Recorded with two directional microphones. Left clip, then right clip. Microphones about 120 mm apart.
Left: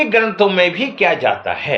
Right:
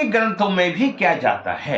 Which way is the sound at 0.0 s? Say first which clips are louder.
Left 5 dB; 40° left (ahead or behind).